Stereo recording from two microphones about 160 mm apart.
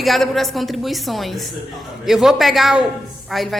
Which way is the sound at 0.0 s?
Centre (ahead or behind).